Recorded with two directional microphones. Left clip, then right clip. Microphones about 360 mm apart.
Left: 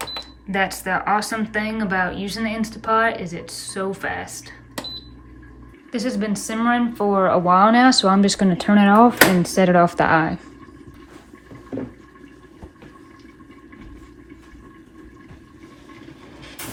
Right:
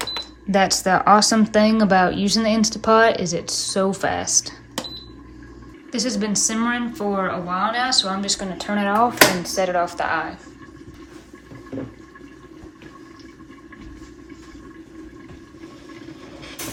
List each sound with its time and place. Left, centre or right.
0.0 s speech: centre
5.9 s speech: centre; by 10.4 s left